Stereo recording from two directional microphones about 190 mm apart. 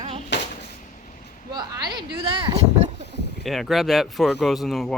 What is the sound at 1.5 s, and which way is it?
Speech, 20° right (ahead or behind).